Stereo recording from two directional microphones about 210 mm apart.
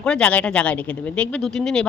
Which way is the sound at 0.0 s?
5° left (ahead or behind).